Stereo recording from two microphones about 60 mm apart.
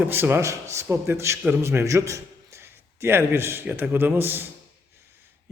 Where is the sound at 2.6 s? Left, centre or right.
Right.